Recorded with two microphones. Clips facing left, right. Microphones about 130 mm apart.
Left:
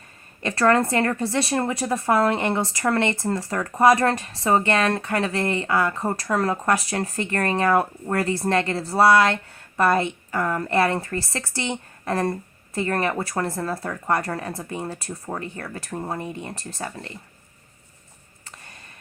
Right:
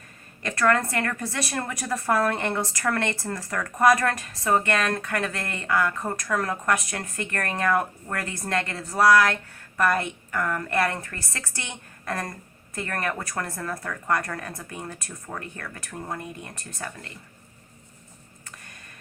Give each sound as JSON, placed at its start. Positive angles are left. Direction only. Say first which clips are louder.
{"t": 0.4, "sound": "a woman's voice", "louder": "left 4 dB", "side_deg": 30}